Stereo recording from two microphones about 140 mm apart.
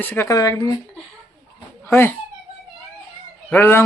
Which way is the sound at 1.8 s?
15° left (ahead or behind).